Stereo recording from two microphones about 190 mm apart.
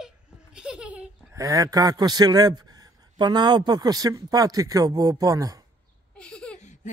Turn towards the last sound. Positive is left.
turn(degrees=5)  # may be behind; listen again after turning